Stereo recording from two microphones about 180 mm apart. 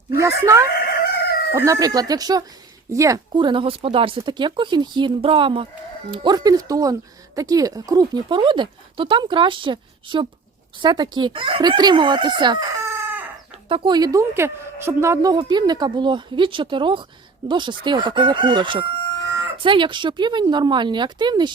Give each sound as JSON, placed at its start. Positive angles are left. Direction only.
{"t": 0.2, "sound": "a woman's voice", "side_deg": -15}
{"t": 13.7, "sound": "a woman's voice", "side_deg": -25}